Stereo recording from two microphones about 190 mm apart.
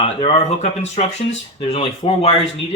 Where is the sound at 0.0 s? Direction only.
35° left (ahead or behind).